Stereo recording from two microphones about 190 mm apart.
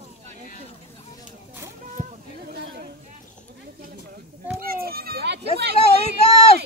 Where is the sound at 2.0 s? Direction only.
50° right (ahead or behind).